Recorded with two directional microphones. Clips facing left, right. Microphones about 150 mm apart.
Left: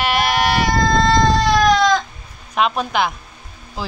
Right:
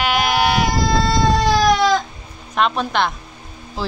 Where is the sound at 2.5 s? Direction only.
5° left (ahead or behind).